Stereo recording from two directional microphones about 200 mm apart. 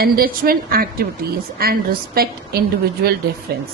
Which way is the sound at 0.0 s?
50° right (ahead or behind).